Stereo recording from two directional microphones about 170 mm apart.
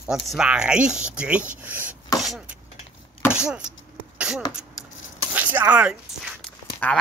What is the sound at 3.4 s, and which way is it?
Speech, 5° right (ahead or behind).